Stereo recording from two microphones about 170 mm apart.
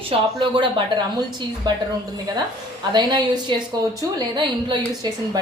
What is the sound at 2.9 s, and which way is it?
A woman's voice, 25° right (ahead or behind).